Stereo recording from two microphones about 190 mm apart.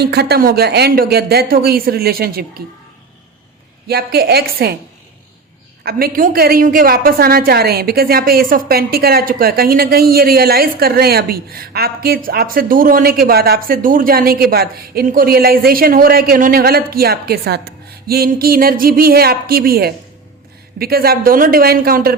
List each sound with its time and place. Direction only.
0.0 s speech: 60° right (ahead or behind)
3.8 s speech: 55° right (ahead or behind)
5.8 s a woman's voice: 55° right (ahead or behind)